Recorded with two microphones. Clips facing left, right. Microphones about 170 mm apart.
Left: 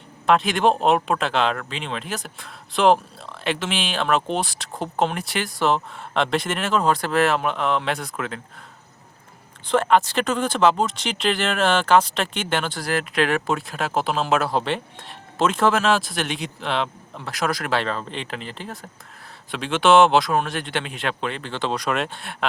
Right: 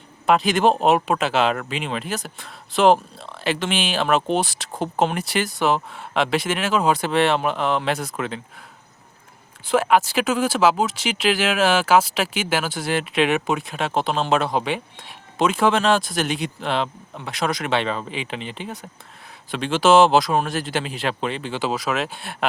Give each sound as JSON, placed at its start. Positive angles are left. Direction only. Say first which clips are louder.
{"t": 0.3, "sound": "speech", "louder": "right 1 dB", "side_deg": 0}
{"t": 9.6, "sound": "speech", "louder": "even", "side_deg": -5}
{"t": 13.0, "sound": "speech", "louder": "right 2 dB", "side_deg": -20}
{"t": 13.6, "sound": "speech", "louder": "right 1 dB", "side_deg": 0}
{"t": 14.5, "sound": "speech", "louder": "even", "side_deg": -10}
{"t": 17.5, "sound": "speech", "louder": "right 2 dB", "side_deg": -20}
{"t": 17.8, "sound": "speech", "louder": "right 1 dB", "side_deg": -5}
{"t": 18.3, "sound": "speech", "louder": "right 2 dB", "side_deg": -20}
{"t": 19.5, "sound": "speech", "louder": "right 1 dB", "side_deg": 0}